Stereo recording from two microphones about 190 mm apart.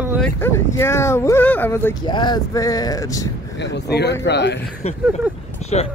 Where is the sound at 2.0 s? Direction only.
25° left (ahead or behind).